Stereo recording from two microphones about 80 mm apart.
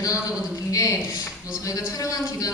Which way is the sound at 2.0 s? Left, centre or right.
Left.